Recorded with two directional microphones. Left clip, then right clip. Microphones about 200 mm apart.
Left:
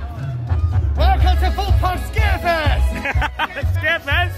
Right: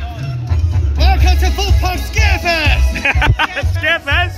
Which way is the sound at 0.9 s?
5° left (ahead or behind).